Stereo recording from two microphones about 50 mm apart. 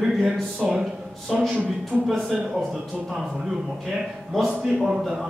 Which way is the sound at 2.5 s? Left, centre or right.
Centre.